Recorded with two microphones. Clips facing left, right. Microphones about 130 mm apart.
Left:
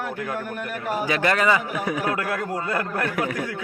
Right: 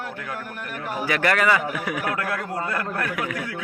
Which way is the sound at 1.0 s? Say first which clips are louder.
Even; 25° left (ahead or behind).